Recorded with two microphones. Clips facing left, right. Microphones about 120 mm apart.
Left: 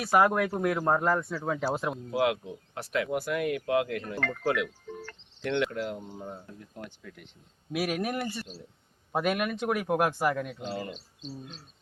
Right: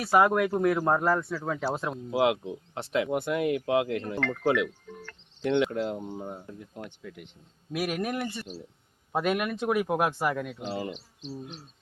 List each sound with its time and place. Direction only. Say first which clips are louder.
0.2 s speech: right 2 dB; centre (ahead or behind)
2.0 s speech: right 3 dB; 20° right (ahead or behind)
4.9 s speech: left 3 dB; 5° left (ahead or behind)
5.4 s speech: right 4 dB; 20° right (ahead or behind)
7.7 s speech: even; 5° left (ahead or behind)
10.7 s speech: right 2 dB; 15° right (ahead or behind)